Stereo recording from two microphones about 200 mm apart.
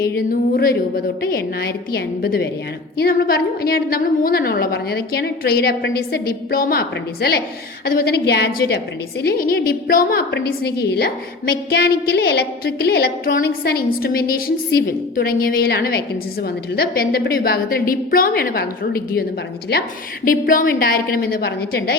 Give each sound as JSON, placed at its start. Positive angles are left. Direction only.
{"t": 0.3, "sound": "a woman's voice", "side_deg": 50}